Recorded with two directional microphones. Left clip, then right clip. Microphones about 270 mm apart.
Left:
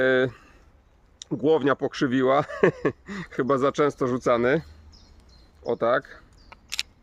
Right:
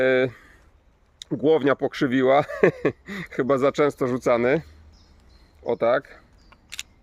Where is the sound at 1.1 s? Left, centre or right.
Centre.